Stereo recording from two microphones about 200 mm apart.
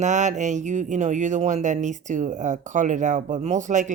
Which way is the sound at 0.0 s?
35° right (ahead or behind).